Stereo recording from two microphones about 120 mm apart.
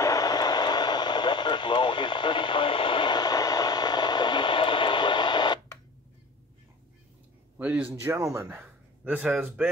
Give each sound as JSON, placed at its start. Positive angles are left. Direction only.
{"t": 0.0, "sound": "radio", "side_deg": 30}
{"t": 7.5, "sound": "a sound", "side_deg": -10}
{"t": 7.9, "sound": "speech", "side_deg": -25}